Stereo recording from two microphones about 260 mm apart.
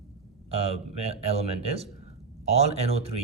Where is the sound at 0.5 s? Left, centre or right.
Right.